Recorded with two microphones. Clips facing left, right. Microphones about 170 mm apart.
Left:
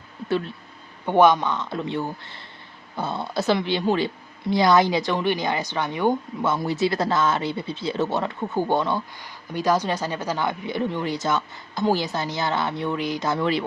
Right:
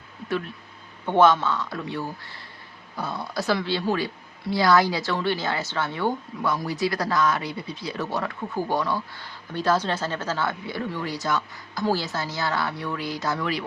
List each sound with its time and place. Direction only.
0.3 s speech: 30° left (ahead or behind)
1.0 s speech: 15° left (ahead or behind)